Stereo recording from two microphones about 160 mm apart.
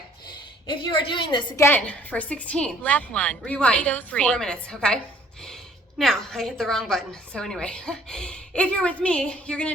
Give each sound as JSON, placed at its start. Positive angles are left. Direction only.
{"t": 0.7, "sound": "a woman's voice", "side_deg": 30}
{"t": 1.5, "sound": "a woman's voice", "side_deg": 15}
{"t": 6.0, "sound": "a woman's voice", "side_deg": 5}